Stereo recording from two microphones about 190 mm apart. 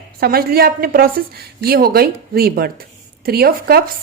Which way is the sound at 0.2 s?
55° right (ahead or behind).